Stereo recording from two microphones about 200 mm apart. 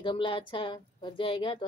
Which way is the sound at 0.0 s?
25° left (ahead or behind).